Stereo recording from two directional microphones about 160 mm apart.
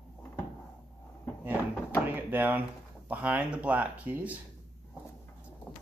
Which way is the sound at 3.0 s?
10° right (ahead or behind).